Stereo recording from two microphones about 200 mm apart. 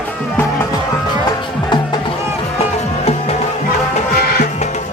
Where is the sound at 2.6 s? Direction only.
35° left (ahead or behind).